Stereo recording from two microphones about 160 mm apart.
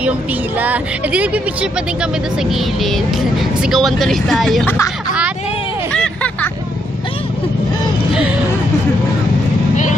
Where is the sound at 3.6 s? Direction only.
Centre (ahead or behind).